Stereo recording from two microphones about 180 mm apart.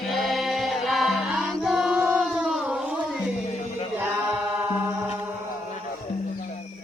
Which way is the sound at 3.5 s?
40° left (ahead or behind).